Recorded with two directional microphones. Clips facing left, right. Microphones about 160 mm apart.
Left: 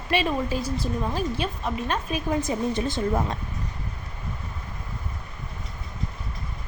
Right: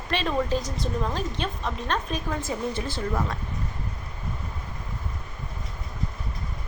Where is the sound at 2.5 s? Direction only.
20° left (ahead or behind).